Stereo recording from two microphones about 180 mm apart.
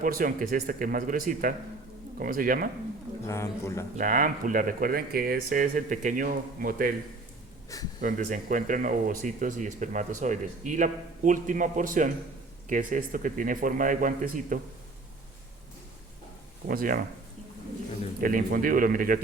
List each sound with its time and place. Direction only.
0.0 s speech: 50° right (ahead or behind)
3.2 s a man's voice: 15° left (ahead or behind)
3.9 s speech: 45° right (ahead or behind)
8.0 s speech: 45° right (ahead or behind)
16.6 s speech: 50° right (ahead or behind)
18.2 s speech: 50° right (ahead or behind)